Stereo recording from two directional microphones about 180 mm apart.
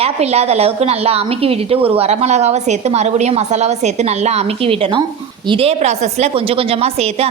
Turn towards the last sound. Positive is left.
turn(degrees=-35)  # may be behind; listen again after turning